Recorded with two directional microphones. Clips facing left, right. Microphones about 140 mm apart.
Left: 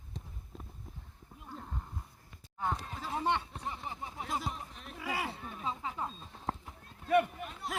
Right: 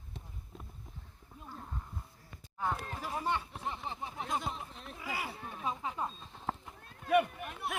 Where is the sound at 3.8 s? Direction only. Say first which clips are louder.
Right 1 dB; 20° right (ahead or behind).